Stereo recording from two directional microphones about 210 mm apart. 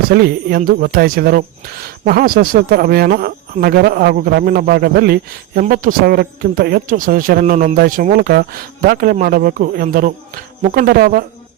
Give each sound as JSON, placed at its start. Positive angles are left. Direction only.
{"t": 0.1, "sound": "speech", "side_deg": -45}